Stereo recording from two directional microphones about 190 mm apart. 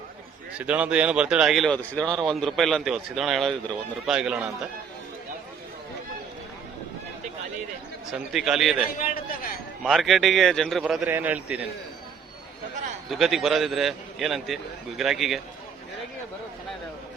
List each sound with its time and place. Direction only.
0.6 s speech: 5° right (ahead or behind)
8.1 s speech: 5° right (ahead or behind)
8.9 s a man's voice: 50° left (ahead or behind)
9.8 s speech: centre (ahead or behind)
13.1 s speech: centre (ahead or behind)